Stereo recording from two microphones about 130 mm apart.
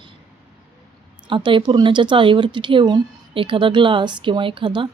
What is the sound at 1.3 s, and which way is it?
Speech, 40° right (ahead or behind).